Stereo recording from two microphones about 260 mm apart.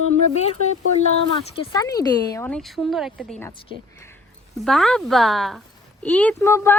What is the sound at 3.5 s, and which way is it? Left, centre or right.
Speech, centre.